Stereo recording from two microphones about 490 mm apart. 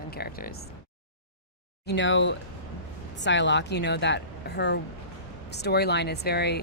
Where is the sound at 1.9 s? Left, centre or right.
Left.